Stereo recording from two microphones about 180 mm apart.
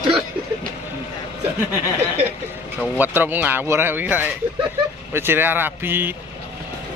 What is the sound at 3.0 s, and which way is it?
Speech, 10° right (ahead or behind).